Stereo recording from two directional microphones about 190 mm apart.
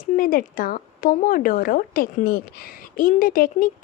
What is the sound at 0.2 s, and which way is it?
Speech, 50° left (ahead or behind).